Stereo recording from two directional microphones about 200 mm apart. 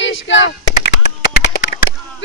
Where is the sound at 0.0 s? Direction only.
70° left (ahead or behind).